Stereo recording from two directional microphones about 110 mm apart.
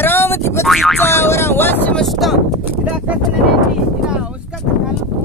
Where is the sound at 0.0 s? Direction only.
20° left (ahead or behind).